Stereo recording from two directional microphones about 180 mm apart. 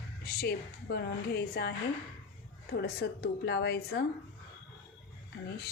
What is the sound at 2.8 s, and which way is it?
A woman's voice, 65° left (ahead or behind).